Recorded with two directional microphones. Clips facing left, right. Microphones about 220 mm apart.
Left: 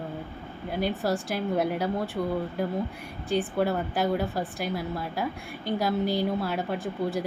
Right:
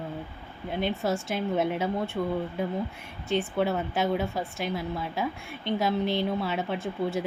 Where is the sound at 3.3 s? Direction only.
Centre (ahead or behind).